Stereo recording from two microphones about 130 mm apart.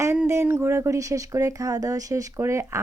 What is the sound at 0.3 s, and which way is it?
Speech, 20° right (ahead or behind).